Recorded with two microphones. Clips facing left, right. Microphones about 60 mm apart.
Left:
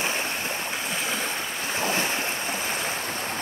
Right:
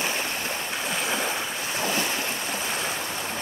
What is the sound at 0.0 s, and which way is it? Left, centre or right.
Stream, left.